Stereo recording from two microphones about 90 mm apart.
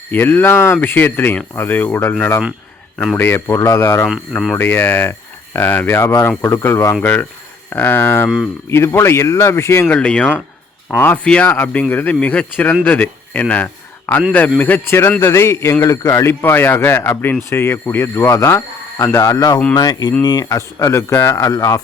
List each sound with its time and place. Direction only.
0.1 s speech: 25° left (ahead or behind)
3.2 s speech: 25° left (ahead or behind)
4.3 s speech: 5° left (ahead or behind)
4.5 s speech: 25° left (ahead or behind)
9.9 s speech: 15° left (ahead or behind); by 16.3 s 35° left (ahead or behind)
16.4 s speech: 25° left (ahead or behind)